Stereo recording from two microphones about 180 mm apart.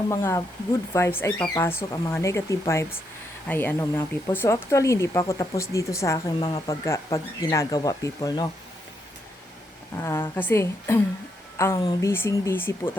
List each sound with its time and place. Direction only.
0.1 s speech: 15° left (ahead or behind)
9.9 s speech: 15° left (ahead or behind)